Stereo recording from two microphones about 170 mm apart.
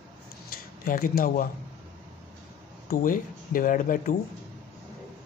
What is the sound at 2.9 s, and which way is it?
Speech, 55° left (ahead or behind).